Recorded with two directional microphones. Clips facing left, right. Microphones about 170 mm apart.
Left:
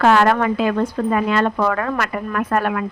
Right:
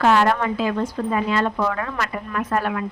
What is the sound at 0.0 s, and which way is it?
Speech, 65° left (ahead or behind).